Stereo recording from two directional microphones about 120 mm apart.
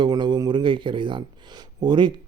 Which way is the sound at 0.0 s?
40° right (ahead or behind).